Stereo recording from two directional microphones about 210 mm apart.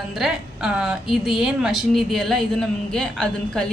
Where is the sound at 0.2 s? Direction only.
Centre (ahead or behind).